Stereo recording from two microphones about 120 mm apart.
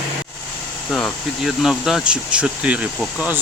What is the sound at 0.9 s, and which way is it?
Speech, 5° left (ahead or behind).